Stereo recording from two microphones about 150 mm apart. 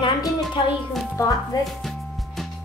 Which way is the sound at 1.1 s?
25° left (ahead or behind).